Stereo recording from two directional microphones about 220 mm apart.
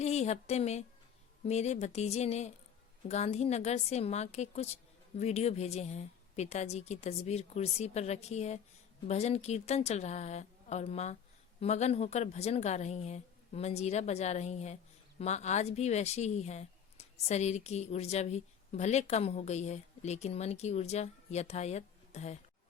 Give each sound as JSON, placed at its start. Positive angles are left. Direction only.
{"t": 0.0, "sound": "speech", "side_deg": 30}